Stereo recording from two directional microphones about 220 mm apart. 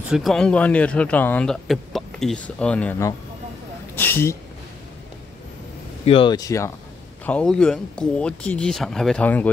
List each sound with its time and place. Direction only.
0.1 s speech: centre (ahead or behind)
6.0 s speech: 25° left (ahead or behind)
7.2 s speech: 5° left (ahead or behind)